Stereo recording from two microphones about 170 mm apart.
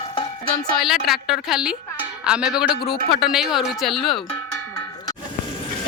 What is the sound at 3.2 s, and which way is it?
Speech, centre (ahead or behind).